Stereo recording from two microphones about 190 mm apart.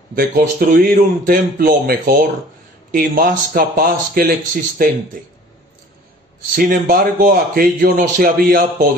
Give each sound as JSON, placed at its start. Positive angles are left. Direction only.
{"t": 0.1, "sound": "a man's voice", "side_deg": -50}
{"t": 6.5, "sound": "a man's voice", "side_deg": -50}